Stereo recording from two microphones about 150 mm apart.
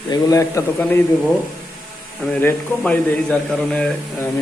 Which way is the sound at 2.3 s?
10° left (ahead or behind).